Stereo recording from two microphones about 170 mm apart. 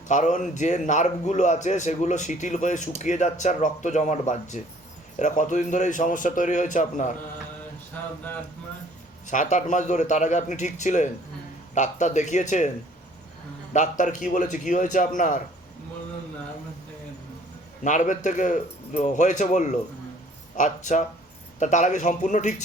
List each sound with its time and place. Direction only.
0.1 s a man's voice: 45° left (ahead or behind)
9.2 s a man's voice: 50° left (ahead or behind)
13.7 s a man's voice: 45° left (ahead or behind)
17.8 s a man's voice: 45° left (ahead or behind)